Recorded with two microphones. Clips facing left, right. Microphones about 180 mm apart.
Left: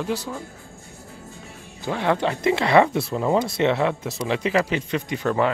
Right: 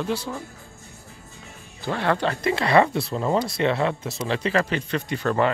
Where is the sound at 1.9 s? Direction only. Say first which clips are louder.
Left 1 dB; 15° left (ahead or behind).